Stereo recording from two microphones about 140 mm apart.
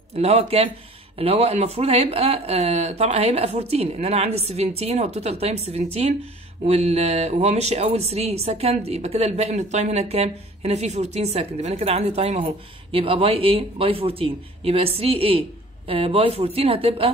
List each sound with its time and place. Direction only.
0.1 s speech: 50° right (ahead or behind)